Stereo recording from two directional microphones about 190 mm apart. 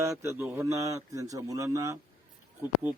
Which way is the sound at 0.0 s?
15° right (ahead or behind).